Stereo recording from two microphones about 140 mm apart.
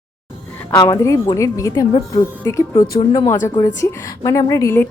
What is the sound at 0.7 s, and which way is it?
A woman's voice, 25° left (ahead or behind).